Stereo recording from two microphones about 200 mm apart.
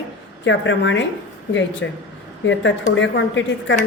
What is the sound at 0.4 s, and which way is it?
A woman's voice, 65° left (ahead or behind).